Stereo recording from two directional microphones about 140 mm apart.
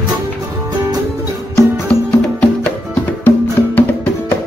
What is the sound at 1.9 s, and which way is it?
Music, 10° left (ahead or behind).